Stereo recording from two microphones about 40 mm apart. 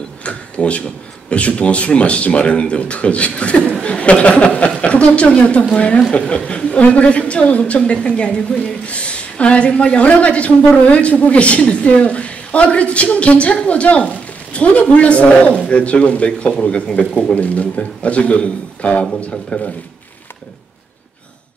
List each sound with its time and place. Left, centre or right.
0.2 s a sound: left
1.3 s a woman's voice: left
16.3 s speech: left
17.4 s a woman's voice: left